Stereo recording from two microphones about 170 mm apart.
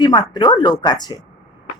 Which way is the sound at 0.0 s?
25° left (ahead or behind).